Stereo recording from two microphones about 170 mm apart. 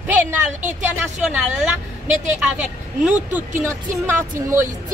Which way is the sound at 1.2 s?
10° right (ahead or behind).